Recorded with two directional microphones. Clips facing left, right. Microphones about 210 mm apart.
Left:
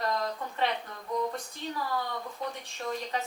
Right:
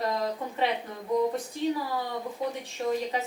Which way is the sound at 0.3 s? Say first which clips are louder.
Right 4 dB; 20° right (ahead or behind).